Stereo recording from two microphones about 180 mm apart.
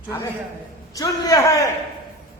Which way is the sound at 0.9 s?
20° left (ahead or behind).